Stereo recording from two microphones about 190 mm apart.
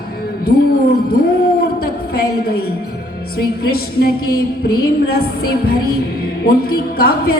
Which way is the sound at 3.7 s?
55° left (ahead or behind).